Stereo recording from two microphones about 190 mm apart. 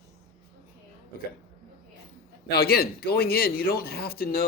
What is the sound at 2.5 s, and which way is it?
Speech, 55° left (ahead or behind).